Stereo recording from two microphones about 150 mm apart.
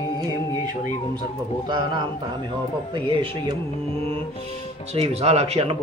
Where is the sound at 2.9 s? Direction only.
35° right (ahead or behind).